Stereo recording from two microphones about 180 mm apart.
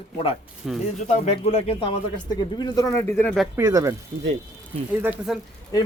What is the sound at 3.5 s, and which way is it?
Speech, 20° right (ahead or behind).